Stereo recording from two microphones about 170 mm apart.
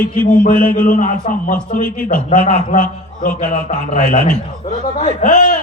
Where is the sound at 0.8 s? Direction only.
50° left (ahead or behind).